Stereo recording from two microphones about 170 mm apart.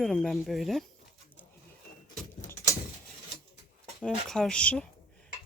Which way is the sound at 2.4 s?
15° left (ahead or behind).